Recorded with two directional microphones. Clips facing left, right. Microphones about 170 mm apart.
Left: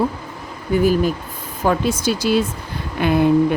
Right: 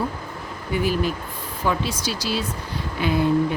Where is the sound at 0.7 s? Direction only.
45° left (ahead or behind).